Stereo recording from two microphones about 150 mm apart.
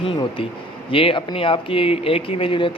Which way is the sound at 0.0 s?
35° left (ahead or behind).